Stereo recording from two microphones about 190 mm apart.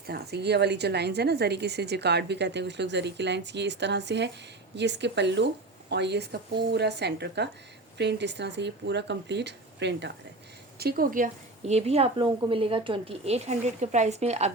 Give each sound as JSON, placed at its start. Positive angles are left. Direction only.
{"t": 0.1, "sound": "a woman's voice", "side_deg": -60}
{"t": 10.8, "sound": "a woman's voice", "side_deg": -55}